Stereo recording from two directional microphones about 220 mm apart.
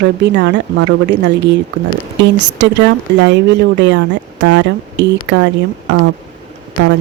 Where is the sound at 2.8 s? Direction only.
55° right (ahead or behind).